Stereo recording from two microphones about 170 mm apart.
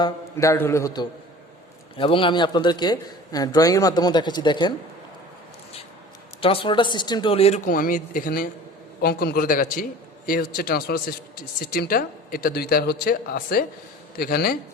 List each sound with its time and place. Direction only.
0.0 s a man's voice: 20° left (ahead or behind)
2.0 s a man's voice: 30° left (ahead or behind)
6.4 s speech: 30° left (ahead or behind); by 14.6 s 60° left (ahead or behind)